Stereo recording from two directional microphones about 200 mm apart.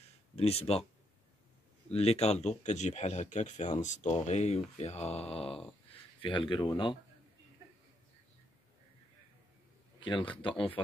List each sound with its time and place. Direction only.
0.4 s speech: 30° left (ahead or behind)
1.9 s speech: 30° left (ahead or behind)
9.9 s speech: 25° left (ahead or behind)